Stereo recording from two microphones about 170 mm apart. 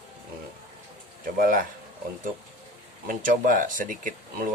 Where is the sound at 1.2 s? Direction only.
55° right (ahead or behind).